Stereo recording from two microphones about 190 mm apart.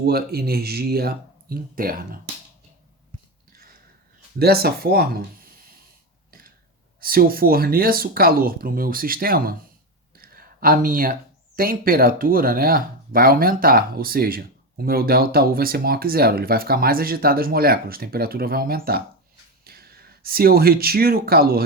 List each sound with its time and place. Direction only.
0.0 s speech: 55° right (ahead or behind)
4.4 s speech: 55° right (ahead or behind)
7.0 s speech: 50° right (ahead or behind)